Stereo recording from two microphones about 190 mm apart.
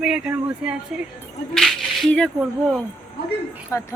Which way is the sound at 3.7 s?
15° left (ahead or behind).